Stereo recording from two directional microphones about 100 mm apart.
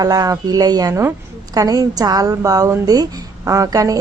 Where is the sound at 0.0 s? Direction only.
40° right (ahead or behind).